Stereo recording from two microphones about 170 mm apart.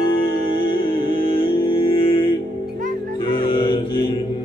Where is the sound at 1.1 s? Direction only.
30° left (ahead or behind).